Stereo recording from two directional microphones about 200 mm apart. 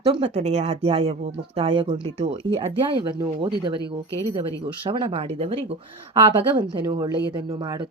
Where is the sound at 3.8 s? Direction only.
15° left (ahead or behind).